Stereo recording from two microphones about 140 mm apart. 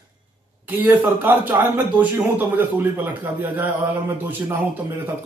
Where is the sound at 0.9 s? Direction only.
15° right (ahead or behind).